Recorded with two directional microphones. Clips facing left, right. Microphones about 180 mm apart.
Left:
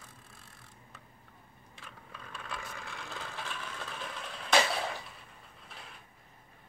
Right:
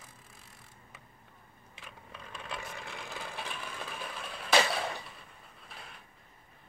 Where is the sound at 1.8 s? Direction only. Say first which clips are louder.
Right 1 dB; 20° right (ahead or behind).